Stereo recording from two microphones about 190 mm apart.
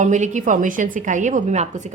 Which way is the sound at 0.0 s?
40° right (ahead or behind).